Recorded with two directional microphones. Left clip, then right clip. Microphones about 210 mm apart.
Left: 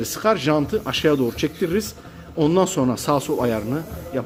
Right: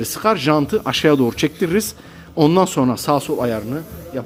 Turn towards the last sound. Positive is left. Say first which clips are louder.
# even
turn(degrees=-5)  # may be behind; listen again after turning